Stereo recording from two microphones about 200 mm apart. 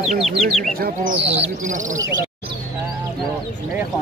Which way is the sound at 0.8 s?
40° right (ahead or behind).